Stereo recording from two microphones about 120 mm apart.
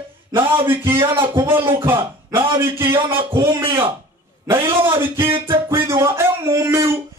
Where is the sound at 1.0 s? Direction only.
35° right (ahead or behind).